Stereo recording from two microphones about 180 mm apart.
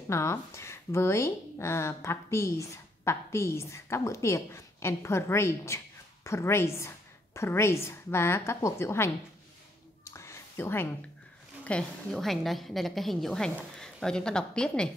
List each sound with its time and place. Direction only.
0.1 s speech: 15° left (ahead or behind)
10.1 s a sound: 15° left (ahead or behind)
11.6 s a woman's voice: 5° left (ahead or behind)